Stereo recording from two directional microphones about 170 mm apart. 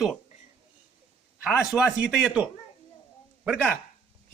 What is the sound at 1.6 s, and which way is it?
Speech, centre (ahead or behind).